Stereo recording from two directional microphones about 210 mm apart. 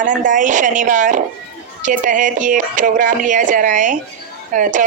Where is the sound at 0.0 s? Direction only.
40° right (ahead or behind).